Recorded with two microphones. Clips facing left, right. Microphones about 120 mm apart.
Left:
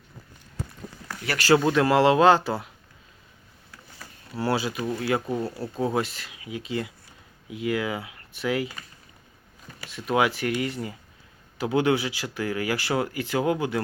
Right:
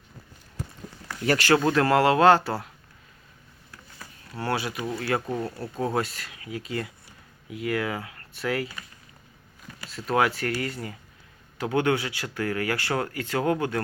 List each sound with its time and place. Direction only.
1.5 s a man's voice: 15° left (ahead or behind)
4.4 s a man's voice: 25° left (ahead or behind)
9.9 s speech: 20° left (ahead or behind)